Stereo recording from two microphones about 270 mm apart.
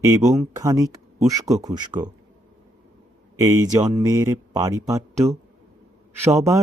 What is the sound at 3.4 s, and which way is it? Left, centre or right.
Speech, centre.